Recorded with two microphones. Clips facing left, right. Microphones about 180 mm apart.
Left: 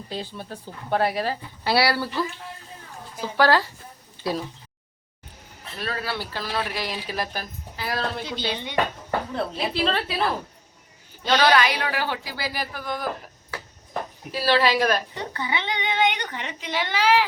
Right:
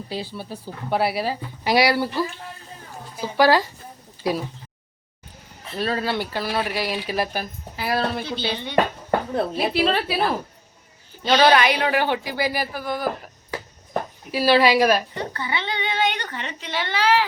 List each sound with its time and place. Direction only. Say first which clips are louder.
0.1 s speech: right 1 dB; 10° right (ahead or behind)
3.2 s speech: right 2 dB; 15° right (ahead or behind)
5.8 s speech: right 6 dB; 25° right (ahead or behind); by 8.2 s 10° right (ahead or behind)
8.4 s speech: right 2 dB; 15° left (ahead or behind)
8.7 s a sound: right 6 dB; 45° right (ahead or behind)
9.7 s speech: right 3 dB; 10° right (ahead or behind)
11.2 s speech: right 3 dB; 15° right (ahead or behind)
14.3 s speech: right 4 dB; 10° right (ahead or behind)
15.3 s a child's voice: even; 15° left (ahead or behind)